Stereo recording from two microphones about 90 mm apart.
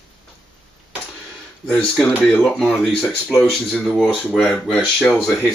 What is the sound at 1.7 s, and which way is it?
Speech, 15° left (ahead or behind).